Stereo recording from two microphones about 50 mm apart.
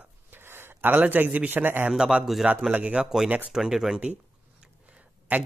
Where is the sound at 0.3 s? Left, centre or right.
Right.